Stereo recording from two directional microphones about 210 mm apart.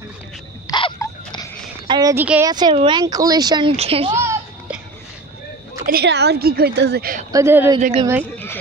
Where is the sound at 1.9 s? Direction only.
15° right (ahead or behind).